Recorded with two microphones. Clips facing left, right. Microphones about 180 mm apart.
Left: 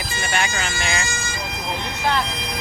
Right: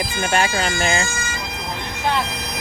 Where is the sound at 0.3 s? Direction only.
35° right (ahead or behind).